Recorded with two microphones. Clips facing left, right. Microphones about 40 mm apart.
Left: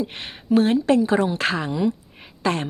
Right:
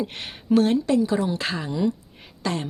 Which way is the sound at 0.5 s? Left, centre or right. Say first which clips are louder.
Left 1 dB; left.